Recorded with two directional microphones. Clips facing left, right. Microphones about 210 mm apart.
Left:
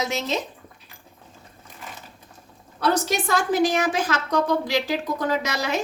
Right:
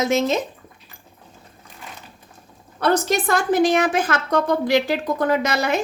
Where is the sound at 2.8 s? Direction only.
55° right (ahead or behind).